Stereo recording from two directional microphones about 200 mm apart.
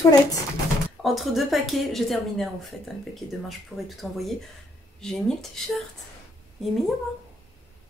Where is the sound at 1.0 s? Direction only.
Centre (ahead or behind).